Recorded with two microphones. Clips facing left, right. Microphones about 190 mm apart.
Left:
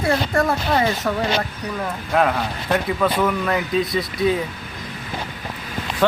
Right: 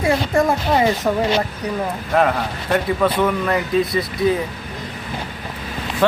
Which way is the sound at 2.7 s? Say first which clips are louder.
Right 2 dB; centre (ahead or behind).